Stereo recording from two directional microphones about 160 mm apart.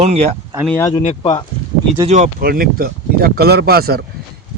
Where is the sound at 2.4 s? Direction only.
65° right (ahead or behind).